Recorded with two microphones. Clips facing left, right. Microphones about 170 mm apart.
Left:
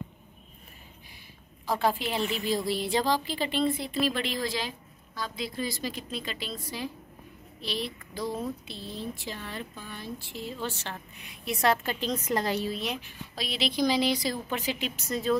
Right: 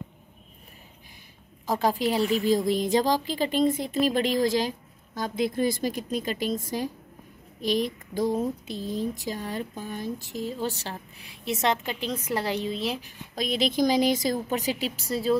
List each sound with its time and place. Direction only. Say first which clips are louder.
1.7 s a woman's voice: right 3 dB; 40° right (ahead or behind)
11.6 s a woman's voice: left 1 dB; 15° right (ahead or behind)
12.7 s a woman's voice: right 3 dB; 30° right (ahead or behind)